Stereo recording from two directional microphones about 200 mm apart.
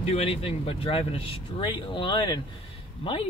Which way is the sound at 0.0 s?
30° left (ahead or behind).